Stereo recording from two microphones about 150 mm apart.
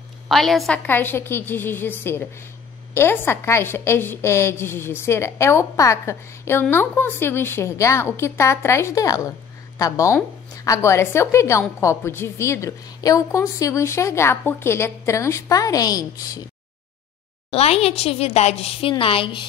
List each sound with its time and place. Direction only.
0.3 s a woman's voice: centre (ahead or behind)
0.8 s a woman's voice: 15° left (ahead or behind)
17.5 s a woman's voice: 45° left (ahead or behind)